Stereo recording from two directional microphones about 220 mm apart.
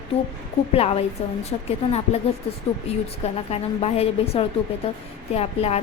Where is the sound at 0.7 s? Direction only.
25° left (ahead or behind).